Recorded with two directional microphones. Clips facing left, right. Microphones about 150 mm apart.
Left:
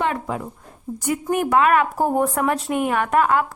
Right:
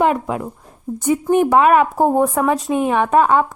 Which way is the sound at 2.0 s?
25° right (ahead or behind).